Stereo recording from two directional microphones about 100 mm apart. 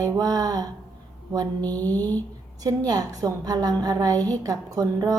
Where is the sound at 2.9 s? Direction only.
40° right (ahead or behind).